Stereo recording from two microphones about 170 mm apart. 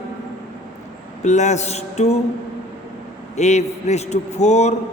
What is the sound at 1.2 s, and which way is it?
A man's voice, 45° left (ahead or behind).